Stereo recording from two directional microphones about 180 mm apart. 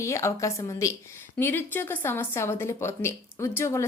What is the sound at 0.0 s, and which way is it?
Speech, 15° left (ahead or behind).